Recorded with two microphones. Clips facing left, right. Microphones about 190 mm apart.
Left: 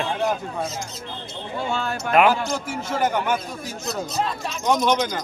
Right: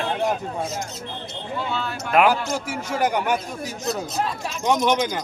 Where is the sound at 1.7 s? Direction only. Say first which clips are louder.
Left 2 dB; 45° left (ahead or behind).